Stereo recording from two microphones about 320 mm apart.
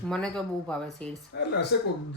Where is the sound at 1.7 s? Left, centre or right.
Left.